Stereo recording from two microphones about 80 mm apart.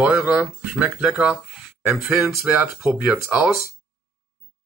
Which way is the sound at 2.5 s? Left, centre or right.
Right.